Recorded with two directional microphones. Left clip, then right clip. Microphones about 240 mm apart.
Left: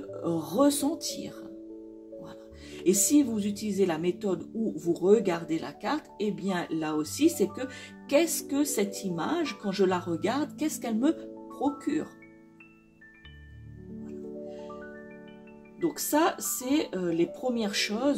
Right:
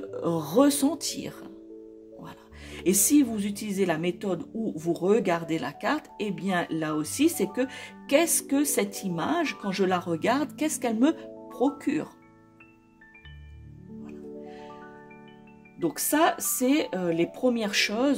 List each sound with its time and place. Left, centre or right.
0.2 s speech: right
15.8 s speech: right